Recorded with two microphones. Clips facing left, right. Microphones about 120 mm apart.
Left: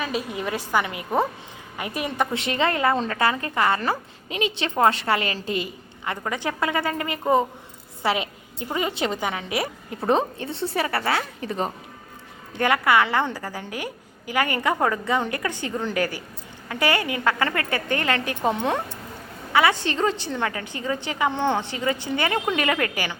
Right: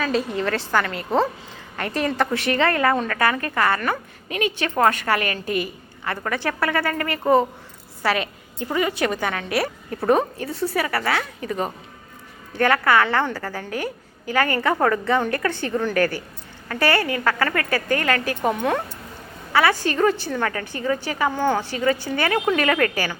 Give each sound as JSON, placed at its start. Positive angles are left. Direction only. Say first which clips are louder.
{"t": 0.0, "sound": "a woman's voice", "louder": "right 5 dB", "side_deg": 10}
{"t": 8.0, "sound": "a sound", "louder": "right 1 dB", "side_deg": 20}
{"t": 8.7, "sound": "a woman's voice", "louder": "right 3 dB", "side_deg": 20}
{"t": 12.5, "sound": "a woman's voice", "louder": "right 2 dB", "side_deg": 15}